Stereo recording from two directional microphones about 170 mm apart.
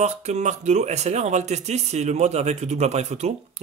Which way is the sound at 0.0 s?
40° right (ahead or behind).